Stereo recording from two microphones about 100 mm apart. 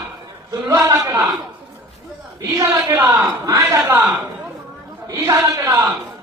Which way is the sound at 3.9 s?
20° right (ahead or behind).